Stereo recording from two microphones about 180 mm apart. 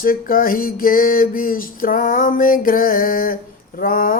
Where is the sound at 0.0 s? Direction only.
50° left (ahead or behind).